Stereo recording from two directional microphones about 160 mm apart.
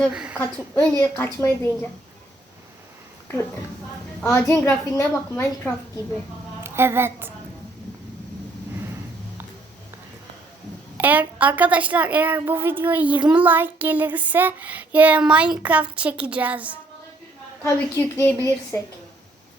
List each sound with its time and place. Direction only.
0.1 s a woman's voice: 5° right (ahead or behind); by 1.7 s 15° left (ahead or behind)
4.3 s a woman's voice: 15° left (ahead or behind)
5.3 s a woman's voice: 5° left (ahead or behind)
6.6 s a woman's voice: 15° right (ahead or behind)
10.9 s a woman's voice: 10° right (ahead or behind)
17.6 s a woman's voice: 15° left (ahead or behind)